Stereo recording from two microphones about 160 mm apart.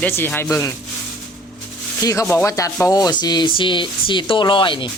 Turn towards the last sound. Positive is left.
turn(degrees=30)  # may be behind; listen again after turning